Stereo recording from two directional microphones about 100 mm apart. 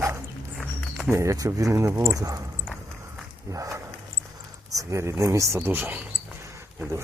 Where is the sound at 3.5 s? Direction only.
30° right (ahead or behind).